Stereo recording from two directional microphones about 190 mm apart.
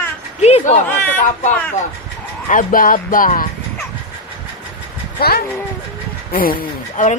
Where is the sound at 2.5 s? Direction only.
45° left (ahead or behind).